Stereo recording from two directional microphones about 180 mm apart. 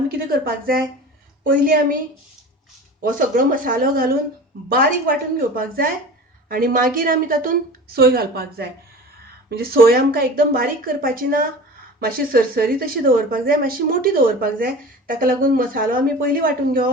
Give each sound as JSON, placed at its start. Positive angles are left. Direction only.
{"t": 0.3, "sound": "a woman's voice", "side_deg": -55}
{"t": 3.0, "sound": "a woman's voice", "side_deg": -50}